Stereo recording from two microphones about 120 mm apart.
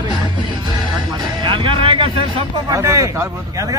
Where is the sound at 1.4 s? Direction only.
45° right (ahead or behind).